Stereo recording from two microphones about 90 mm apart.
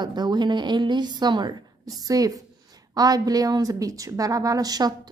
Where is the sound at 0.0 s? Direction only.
55° right (ahead or behind).